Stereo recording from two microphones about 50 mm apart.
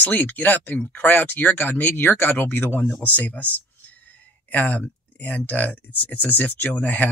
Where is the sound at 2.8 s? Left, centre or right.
Left.